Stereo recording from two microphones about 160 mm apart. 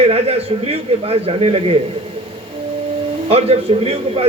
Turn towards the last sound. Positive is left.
turn(degrees=-40)  # may be behind; listen again after turning